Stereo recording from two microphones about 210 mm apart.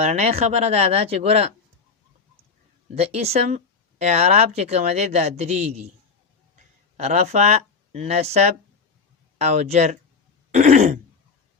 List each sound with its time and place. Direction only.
0.0 s speech: 30° right (ahead or behind)
2.9 s speech: 30° right (ahead or behind)
6.9 s speech: 30° right (ahead or behind)
10.5 s throat clearing: 35° right (ahead or behind)